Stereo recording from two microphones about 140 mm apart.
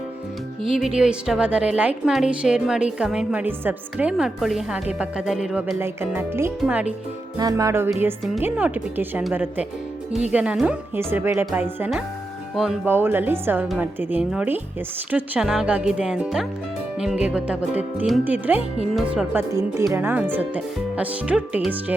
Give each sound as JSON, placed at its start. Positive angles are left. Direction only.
{"t": 0.7, "sound": "a woman's voice", "side_deg": -5}
{"t": 5.8, "sound": "speech", "side_deg": -15}
{"t": 7.3, "sound": "music", "side_deg": -25}
{"t": 8.4, "sound": "speech", "side_deg": -10}